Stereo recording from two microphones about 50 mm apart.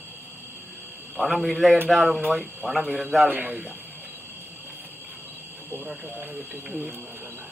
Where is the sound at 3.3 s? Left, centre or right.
Right.